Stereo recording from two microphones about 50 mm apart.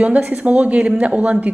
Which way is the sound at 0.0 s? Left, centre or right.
Right.